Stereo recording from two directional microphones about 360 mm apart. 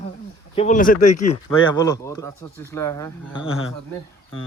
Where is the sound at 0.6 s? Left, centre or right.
Left.